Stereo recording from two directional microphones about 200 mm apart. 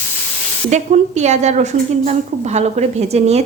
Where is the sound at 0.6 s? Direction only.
35° right (ahead or behind).